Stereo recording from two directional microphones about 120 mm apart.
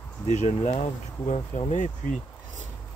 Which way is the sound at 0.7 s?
70° left (ahead or behind).